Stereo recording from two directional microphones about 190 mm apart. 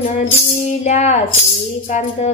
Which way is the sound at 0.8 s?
40° left (ahead or behind).